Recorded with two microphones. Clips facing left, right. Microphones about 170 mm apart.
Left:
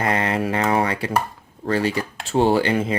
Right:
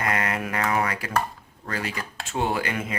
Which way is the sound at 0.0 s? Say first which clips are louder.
Left 5 dB; 30° left (ahead or behind).